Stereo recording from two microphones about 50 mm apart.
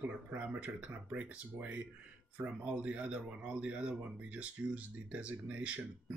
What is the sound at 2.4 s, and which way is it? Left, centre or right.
Speech, right.